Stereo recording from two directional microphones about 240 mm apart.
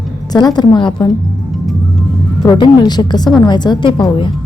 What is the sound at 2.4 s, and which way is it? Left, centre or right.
A woman's voice, centre.